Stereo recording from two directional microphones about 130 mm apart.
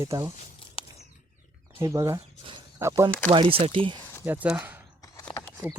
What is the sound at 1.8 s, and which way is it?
Speech, 25° right (ahead or behind).